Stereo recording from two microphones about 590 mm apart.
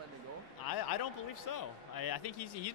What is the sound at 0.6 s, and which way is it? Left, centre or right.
Speech, left.